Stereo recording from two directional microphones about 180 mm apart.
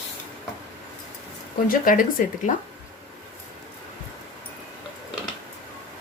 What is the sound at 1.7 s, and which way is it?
Speech, 50° left (ahead or behind).